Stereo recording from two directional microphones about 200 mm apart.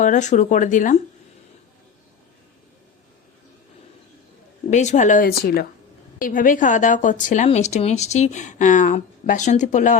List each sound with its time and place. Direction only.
0.0 s speech: 35° left (ahead or behind)
4.7 s speech: 35° left (ahead or behind)